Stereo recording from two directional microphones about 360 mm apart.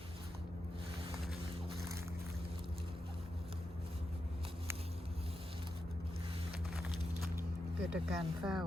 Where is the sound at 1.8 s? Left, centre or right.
Centre.